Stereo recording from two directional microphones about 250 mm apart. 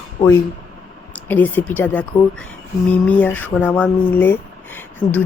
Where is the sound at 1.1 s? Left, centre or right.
Centre.